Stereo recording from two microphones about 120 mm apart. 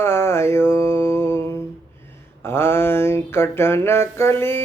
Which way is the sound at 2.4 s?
20° left (ahead or behind).